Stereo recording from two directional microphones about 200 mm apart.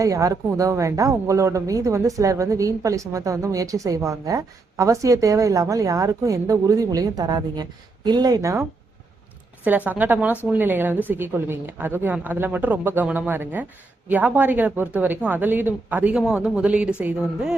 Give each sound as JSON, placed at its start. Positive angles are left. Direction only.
{"t": 0.0, "sound": "speech", "side_deg": -15}
{"t": 9.6, "sound": "speech", "side_deg": -10}